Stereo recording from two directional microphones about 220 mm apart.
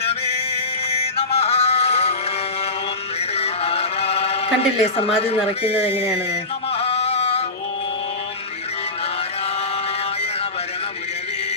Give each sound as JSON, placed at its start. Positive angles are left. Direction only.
{"t": 1.3, "sound": "music", "side_deg": 25}
{"t": 3.3, "sound": "a sound", "side_deg": 25}
{"t": 6.7, "sound": "music", "side_deg": 25}